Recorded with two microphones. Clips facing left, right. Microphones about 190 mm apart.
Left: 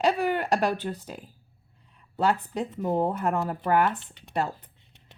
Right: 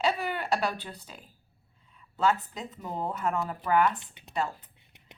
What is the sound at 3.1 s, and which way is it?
Speech, 45° left (ahead or behind).